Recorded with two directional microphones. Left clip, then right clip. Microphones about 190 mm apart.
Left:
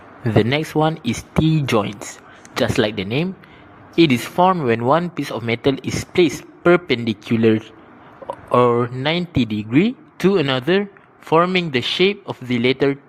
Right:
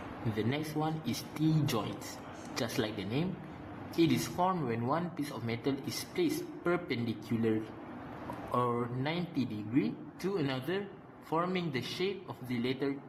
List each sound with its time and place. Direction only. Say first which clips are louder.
0.3 s speech: left 18 dB; 40° left (ahead or behind)